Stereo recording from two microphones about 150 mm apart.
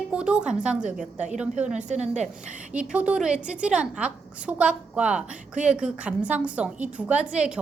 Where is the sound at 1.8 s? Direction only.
50° right (ahead or behind).